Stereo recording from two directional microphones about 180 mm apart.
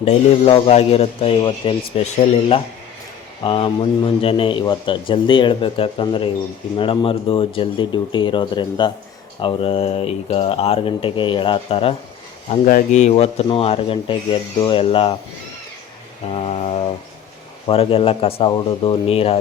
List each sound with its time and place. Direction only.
0.0 s speech: 35° left (ahead or behind)
3.4 s a man's voice: 30° left (ahead or behind)
12.6 s a man's voice: 45° left (ahead or behind); by 15.1 s 30° left (ahead or behind)
16.3 s speech: 35° left (ahead or behind)